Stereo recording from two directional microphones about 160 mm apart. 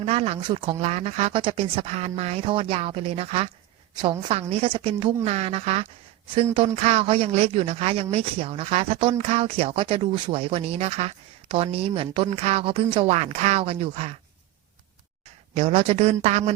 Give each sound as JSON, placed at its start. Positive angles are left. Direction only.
{"t": 0.0, "sound": "speech", "side_deg": -40}
{"t": 15.5, "sound": "speech", "side_deg": -40}